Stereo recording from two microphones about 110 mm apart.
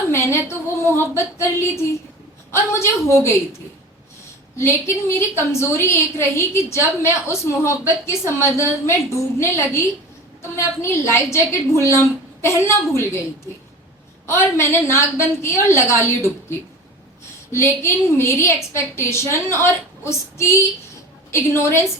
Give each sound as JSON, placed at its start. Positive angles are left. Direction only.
{"t": 0.1, "sound": "a sound", "side_deg": 25}
{"t": 0.9, "sound": "a woman's voice", "side_deg": 25}
{"t": 4.5, "sound": "a woman's voice", "side_deg": 25}
{"t": 14.3, "sound": "a woman's voice", "side_deg": 25}